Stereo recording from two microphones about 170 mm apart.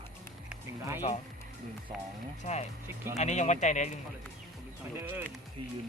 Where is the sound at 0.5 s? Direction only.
15° right (ahead or behind).